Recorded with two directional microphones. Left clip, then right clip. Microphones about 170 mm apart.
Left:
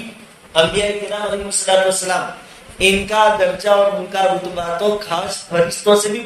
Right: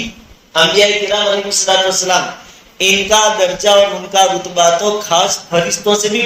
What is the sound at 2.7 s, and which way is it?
Speech, 20° right (ahead or behind).